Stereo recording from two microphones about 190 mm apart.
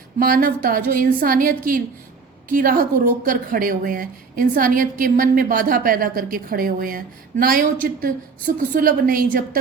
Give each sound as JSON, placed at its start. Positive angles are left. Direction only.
{"t": 0.2, "sound": "a woman's voice", "side_deg": -50}
{"t": 8.7, "sound": "a woman's voice", "side_deg": -45}